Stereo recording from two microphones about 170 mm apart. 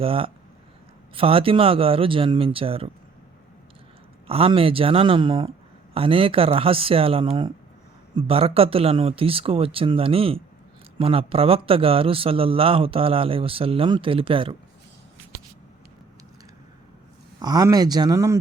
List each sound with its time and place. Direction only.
0.0 s a man's voice: 35° right (ahead or behind)
4.3 s a man's voice: 35° right (ahead or behind)
17.4 s speech: 20° right (ahead or behind)